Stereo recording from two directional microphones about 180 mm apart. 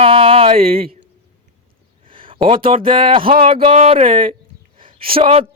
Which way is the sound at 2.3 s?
30° right (ahead or behind).